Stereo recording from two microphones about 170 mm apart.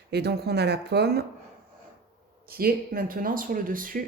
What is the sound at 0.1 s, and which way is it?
Speech, 70° right (ahead or behind).